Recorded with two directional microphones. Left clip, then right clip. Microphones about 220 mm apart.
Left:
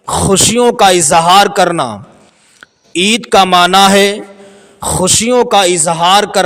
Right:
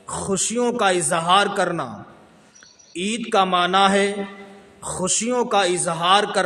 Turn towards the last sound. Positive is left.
turn(degrees=40)  # may be behind; listen again after turning